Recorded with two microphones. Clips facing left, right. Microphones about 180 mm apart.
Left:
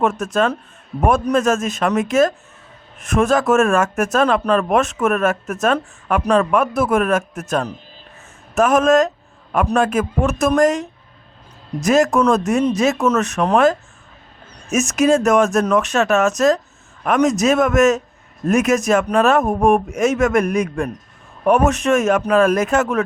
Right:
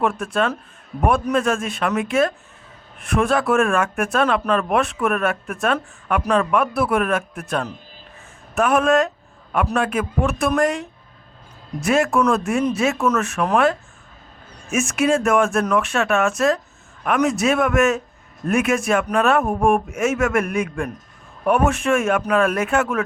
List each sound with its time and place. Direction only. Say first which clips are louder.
0.0 s speech: left 3 dB; 40° left (ahead or behind)